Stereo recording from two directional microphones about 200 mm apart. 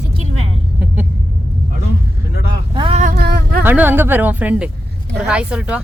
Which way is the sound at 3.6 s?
10° right (ahead or behind).